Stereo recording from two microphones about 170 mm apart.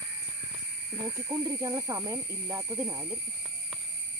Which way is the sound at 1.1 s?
20° right (ahead or behind).